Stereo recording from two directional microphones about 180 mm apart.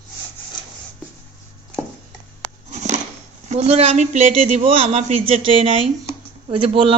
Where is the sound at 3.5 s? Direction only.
35° right (ahead or behind).